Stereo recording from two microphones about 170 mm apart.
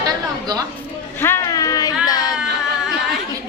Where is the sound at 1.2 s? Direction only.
15° left (ahead or behind).